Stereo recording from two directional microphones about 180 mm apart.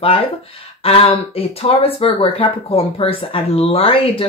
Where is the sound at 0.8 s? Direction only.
30° left (ahead or behind).